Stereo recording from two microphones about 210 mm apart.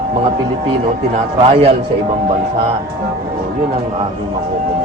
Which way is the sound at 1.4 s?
30° right (ahead or behind).